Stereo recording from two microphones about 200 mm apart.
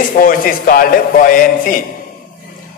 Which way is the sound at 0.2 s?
45° left (ahead or behind).